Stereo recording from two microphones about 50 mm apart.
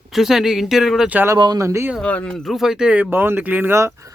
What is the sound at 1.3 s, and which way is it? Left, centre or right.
Speech, right.